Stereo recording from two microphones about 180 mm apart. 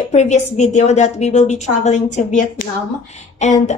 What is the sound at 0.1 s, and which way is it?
A woman's voice, 40° left (ahead or behind).